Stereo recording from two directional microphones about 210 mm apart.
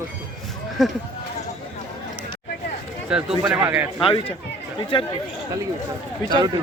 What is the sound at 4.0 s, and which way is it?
Speech, 25° left (ahead or behind).